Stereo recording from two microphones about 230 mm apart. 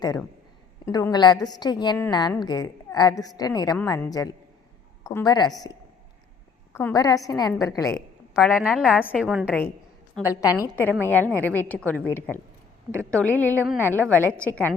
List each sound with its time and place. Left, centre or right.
0.0 s a woman's voice: centre
6.7 s a woman's voice: centre
7.9 s a woman's voice: centre
9.5 s a woman's voice: centre